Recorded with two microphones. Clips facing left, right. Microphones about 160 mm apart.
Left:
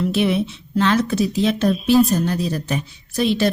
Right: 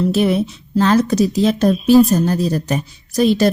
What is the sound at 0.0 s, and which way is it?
A woman's voice, 40° right (ahead or behind).